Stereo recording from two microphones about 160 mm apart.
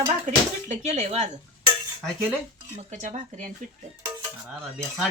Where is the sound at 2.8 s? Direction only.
45° right (ahead or behind).